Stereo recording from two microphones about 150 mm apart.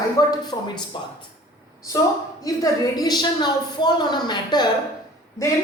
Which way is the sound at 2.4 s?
25° left (ahead or behind).